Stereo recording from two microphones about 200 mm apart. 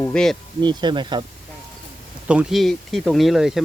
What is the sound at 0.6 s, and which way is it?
Speech, 20° right (ahead or behind).